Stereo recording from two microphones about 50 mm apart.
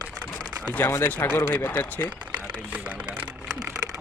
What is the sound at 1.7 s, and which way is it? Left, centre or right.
Speech, left.